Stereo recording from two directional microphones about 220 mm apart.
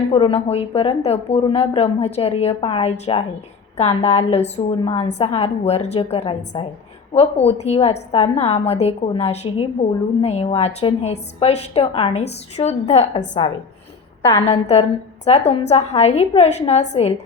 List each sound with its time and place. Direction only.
0.1 s speech: 25° left (ahead or behind)